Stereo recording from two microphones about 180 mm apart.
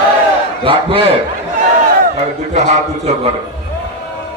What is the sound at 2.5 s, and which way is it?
Speech, 40° right (ahead or behind).